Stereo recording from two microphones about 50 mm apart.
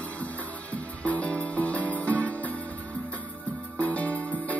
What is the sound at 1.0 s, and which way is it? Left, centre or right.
Music, left.